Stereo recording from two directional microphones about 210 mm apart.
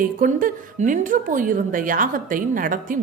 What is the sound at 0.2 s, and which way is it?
A woman's voice, 40° right (ahead or behind).